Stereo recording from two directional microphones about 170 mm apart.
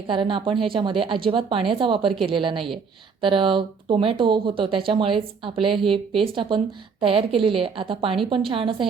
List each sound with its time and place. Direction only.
0.1 s a woman's voice: 30° right (ahead or behind)